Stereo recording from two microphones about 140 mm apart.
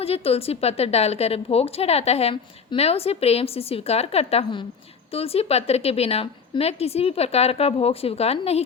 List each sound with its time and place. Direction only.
0.0 s a woman's voice: 45° left (ahead or behind)